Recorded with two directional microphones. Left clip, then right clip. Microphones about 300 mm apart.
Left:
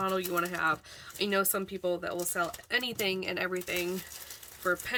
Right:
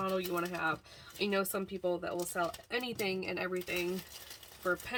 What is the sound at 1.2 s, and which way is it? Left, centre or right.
Speech, centre.